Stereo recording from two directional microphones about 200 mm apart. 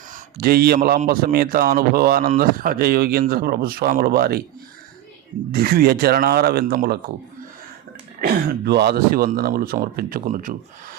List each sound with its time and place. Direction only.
0.1 s a man's voice: 45° right (ahead or behind)
5.5 s a man's voice: 50° right (ahead or behind)
8.2 s a man's voice: 55° right (ahead or behind)